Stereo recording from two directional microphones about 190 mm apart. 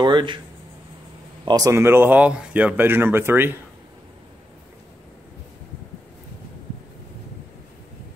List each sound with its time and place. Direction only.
0.0 s speech: 25° right (ahead or behind)
1.4 s speech: 20° right (ahead or behind)